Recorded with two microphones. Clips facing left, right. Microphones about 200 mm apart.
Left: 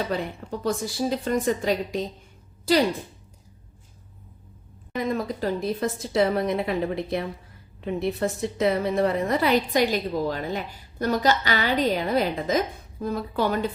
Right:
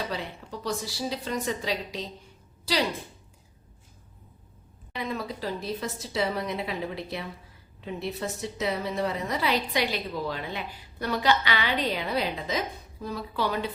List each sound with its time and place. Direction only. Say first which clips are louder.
0.1 s a woman's voice: left 6 dB; 50° left (ahead or behind)
4.9 s a woman's voice: left 6 dB; 45° left (ahead or behind)